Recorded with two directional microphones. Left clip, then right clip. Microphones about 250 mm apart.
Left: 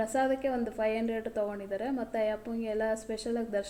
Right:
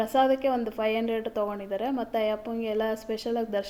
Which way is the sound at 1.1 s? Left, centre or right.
Centre.